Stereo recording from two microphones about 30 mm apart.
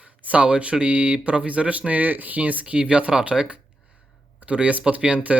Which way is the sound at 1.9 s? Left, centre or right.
Right.